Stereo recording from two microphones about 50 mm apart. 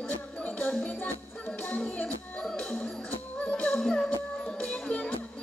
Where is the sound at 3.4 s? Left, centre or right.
Centre.